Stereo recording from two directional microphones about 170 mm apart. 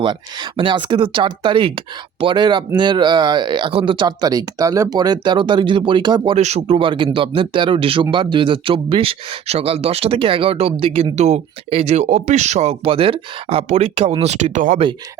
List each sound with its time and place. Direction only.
0.0 s speech: 30° right (ahead or behind); by 14.8 s 50° right (ahead or behind)